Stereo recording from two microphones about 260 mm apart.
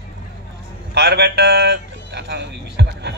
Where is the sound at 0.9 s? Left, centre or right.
Right.